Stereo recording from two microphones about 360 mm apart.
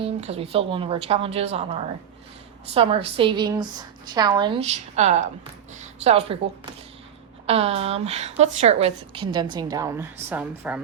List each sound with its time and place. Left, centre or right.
0.0 s a woman's voice: centre
7.4 s a woman's voice: centre